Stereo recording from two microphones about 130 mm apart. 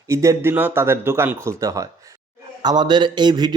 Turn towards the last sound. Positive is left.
turn(degrees=-35)  # may be behind; listen again after turning